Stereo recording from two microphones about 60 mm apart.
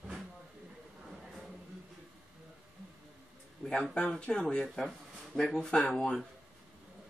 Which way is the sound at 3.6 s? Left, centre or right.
Centre.